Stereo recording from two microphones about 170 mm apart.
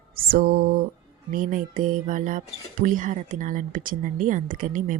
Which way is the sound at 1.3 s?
50° right (ahead or behind).